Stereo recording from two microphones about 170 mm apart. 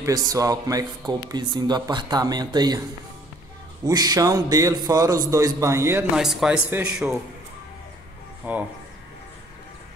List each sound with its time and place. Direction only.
0.0 s speech: 20° right (ahead or behind)
3.8 s a man's voice: 25° right (ahead or behind)
6.1 s speech: 5° right (ahead or behind)
8.5 s a man's voice: 10° right (ahead or behind)